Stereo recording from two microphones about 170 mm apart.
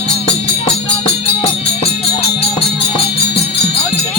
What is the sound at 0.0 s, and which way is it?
Music, 30° left (ahead or behind).